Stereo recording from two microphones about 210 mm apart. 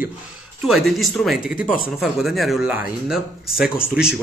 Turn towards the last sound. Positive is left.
turn(degrees=-5)  # may be behind; listen again after turning